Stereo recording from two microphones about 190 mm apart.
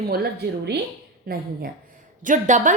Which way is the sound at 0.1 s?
55° right (ahead or behind).